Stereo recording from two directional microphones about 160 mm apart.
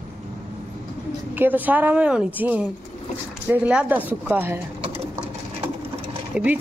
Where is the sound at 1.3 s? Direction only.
10° right (ahead or behind).